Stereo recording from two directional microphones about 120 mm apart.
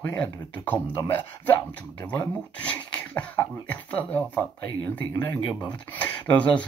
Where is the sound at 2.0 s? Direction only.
15° left (ahead or behind).